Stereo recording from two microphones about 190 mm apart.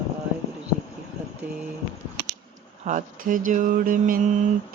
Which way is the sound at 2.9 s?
40° right (ahead or behind).